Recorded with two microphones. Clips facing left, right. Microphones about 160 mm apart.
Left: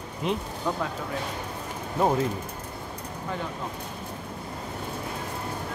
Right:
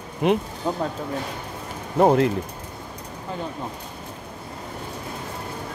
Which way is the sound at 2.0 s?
65° right (ahead or behind).